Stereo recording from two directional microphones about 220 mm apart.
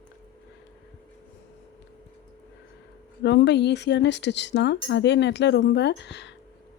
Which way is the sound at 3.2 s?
50° left (ahead or behind).